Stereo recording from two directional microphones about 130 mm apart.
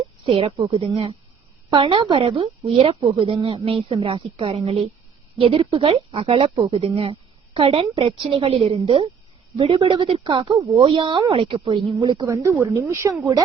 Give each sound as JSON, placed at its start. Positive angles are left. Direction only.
{"t": 0.3, "sound": "a woman's voice", "side_deg": -45}
{"t": 12.3, "sound": "a woman's voice", "side_deg": -20}